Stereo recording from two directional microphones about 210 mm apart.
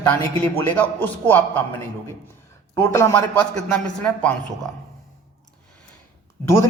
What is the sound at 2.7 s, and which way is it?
Speech, 15° left (ahead or behind).